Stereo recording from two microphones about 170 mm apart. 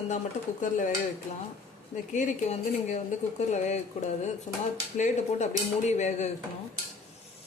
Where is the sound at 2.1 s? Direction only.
45° left (ahead or behind).